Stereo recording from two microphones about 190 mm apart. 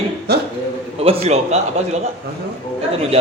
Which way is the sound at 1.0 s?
30° right (ahead or behind).